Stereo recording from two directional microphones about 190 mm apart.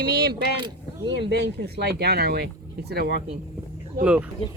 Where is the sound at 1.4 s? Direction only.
60° right (ahead or behind).